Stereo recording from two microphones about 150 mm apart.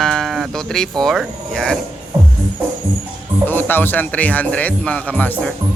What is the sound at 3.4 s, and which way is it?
Speech, 15° left (ahead or behind).